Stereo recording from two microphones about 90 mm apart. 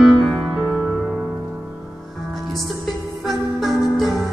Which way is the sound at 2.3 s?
Centre (ahead or behind).